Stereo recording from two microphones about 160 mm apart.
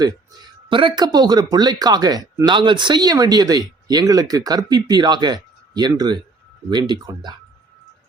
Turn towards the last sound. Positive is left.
turn(degrees=-25)  # may be behind; listen again after turning